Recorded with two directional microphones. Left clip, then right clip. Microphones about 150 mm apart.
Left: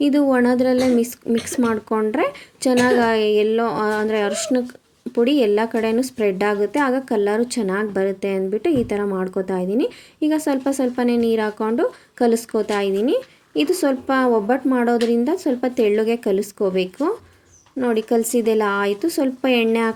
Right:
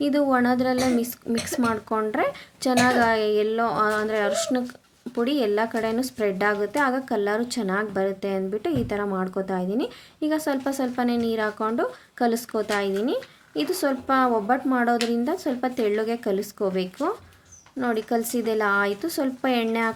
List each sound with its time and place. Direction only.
0.0 s a woman's voice: 20° left (ahead or behind)